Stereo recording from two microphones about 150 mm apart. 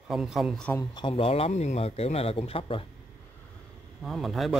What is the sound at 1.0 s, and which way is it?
Speech, 35° left (ahead or behind).